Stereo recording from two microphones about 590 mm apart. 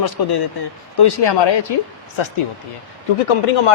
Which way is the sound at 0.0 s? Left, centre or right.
Left.